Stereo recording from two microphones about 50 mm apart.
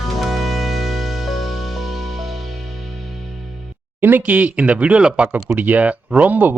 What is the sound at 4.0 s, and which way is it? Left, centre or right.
Speech, right.